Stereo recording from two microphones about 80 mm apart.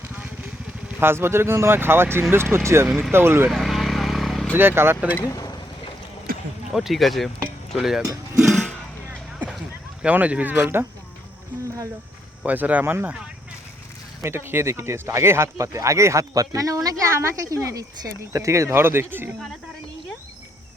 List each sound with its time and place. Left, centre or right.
0.9 s speech: right
2.8 s speech: centre
3.1 s speech: right
3.5 s vehicle: centre
4.5 s speech: right
5.2 s speech: left
6.7 s speech: centre
10.0 s speech: centre
12.5 s speech: centre
14.2 s speech: right